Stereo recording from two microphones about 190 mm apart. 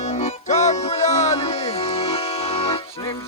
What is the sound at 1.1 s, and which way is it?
Music, 35° left (ahead or behind).